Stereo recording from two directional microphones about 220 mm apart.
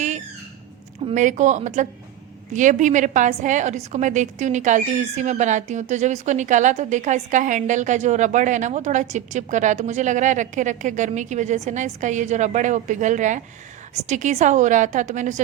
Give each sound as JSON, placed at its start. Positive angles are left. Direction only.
{"t": 1.0, "sound": "a woman's voice", "side_deg": -35}